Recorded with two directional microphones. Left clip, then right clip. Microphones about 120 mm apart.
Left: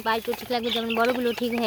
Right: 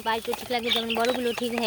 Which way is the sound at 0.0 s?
25° left (ahead or behind).